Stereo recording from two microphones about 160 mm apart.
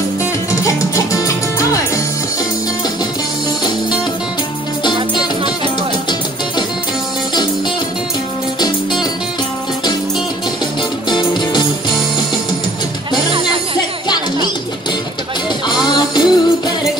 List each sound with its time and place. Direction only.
0.9 s music: 20° left (ahead or behind)
11.1 s music: 25° left (ahead or behind)
13.7 s music: 25° left (ahead or behind)
15.7 s music: 25° left (ahead or behind)